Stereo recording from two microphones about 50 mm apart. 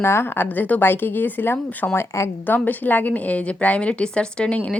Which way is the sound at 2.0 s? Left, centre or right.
Left.